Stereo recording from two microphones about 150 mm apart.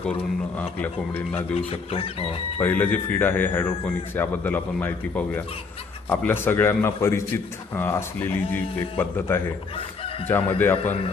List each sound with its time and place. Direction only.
0.0 s a man's voice: 10° left (ahead or behind)
1.5 s speech: 40° left (ahead or behind)
2.6 s a man's voice: 10° left (ahead or behind)
9.7 s chicken: 40° left (ahead or behind)
10.6 s a man's voice: 15° left (ahead or behind)